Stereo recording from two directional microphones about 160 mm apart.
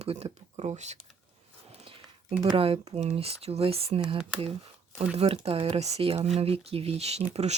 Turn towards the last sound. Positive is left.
turn(degrees=-45)  # may be behind; listen again after turning